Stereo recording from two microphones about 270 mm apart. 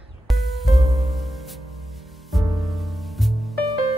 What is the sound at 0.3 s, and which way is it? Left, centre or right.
Music, centre.